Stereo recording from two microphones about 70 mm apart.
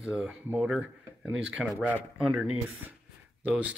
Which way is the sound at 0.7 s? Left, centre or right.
Centre.